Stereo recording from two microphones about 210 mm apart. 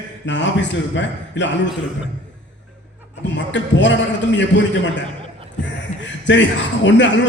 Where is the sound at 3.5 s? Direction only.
60° left (ahead or behind).